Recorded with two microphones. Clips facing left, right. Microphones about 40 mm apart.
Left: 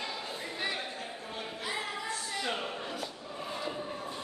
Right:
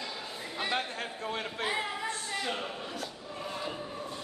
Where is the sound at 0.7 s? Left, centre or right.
Right.